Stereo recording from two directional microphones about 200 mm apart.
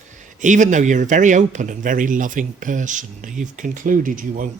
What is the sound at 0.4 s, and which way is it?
Speech, 40° right (ahead or behind).